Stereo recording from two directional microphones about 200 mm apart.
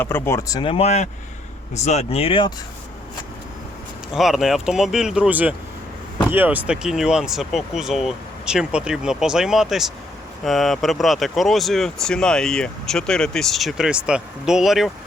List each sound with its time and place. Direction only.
0.0 s speech: 10° left (ahead or behind); by 2.5 s 25° left (ahead or behind)
4.1 s speech: centre (ahead or behind)